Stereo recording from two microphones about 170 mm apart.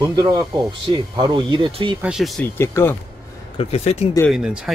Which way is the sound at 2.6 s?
15° left (ahead or behind).